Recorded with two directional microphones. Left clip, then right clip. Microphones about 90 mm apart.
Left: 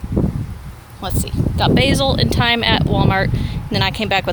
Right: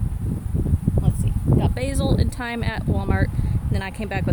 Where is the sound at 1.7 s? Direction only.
10° right (ahead or behind).